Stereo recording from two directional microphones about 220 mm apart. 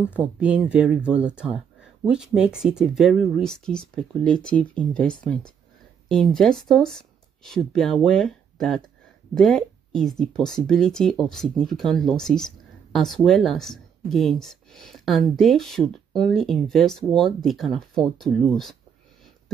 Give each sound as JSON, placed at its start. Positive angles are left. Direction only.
{"t": 0.2, "sound": "speech", "side_deg": -5}